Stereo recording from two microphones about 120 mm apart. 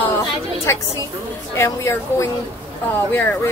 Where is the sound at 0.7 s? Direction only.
25° left (ahead or behind).